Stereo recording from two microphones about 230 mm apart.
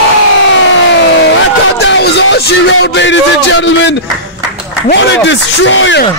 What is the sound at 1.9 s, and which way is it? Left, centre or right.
Speech, left.